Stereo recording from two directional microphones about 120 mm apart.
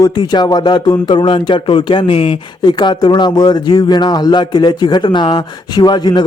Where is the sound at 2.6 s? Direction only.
35° left (ahead or behind).